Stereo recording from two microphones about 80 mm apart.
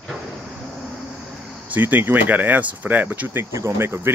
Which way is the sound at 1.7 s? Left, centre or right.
Right.